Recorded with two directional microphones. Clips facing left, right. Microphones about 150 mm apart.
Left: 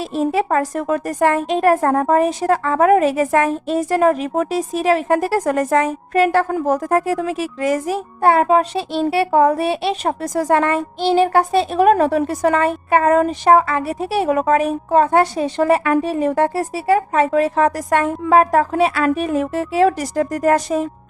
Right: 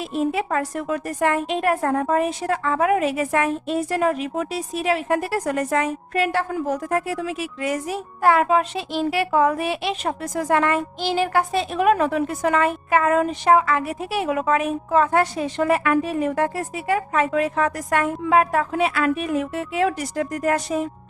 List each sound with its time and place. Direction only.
0.0 s a woman's voice: 35° left (ahead or behind)
8.2 s speech: 30° left (ahead or behind)